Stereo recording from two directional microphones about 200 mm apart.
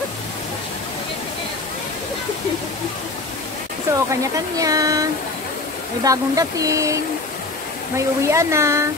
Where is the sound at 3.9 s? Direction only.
15° right (ahead or behind).